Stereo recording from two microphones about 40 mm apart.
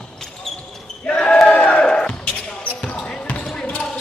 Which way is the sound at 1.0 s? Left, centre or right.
Left.